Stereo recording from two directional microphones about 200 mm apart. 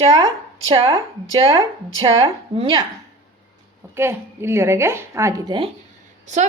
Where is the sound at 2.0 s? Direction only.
25° right (ahead or behind).